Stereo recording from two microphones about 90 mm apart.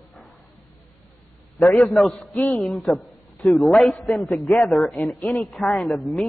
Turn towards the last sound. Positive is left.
turn(degrees=0)  # may be behind; listen again after turning